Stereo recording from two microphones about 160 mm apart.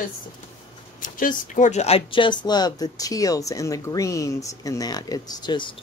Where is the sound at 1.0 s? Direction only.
55° left (ahead or behind).